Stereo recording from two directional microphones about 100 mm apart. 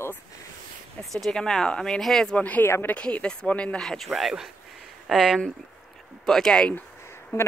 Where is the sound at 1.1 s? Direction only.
5° left (ahead or behind).